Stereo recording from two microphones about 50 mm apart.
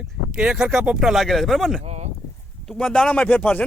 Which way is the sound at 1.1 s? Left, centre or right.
Centre.